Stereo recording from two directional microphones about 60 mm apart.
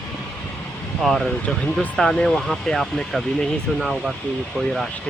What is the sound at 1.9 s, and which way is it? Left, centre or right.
Speech, centre.